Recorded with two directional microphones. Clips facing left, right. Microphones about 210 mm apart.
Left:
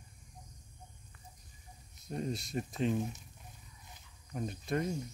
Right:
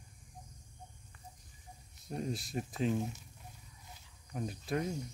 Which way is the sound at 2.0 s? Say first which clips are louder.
Left 1 dB; centre (ahead or behind).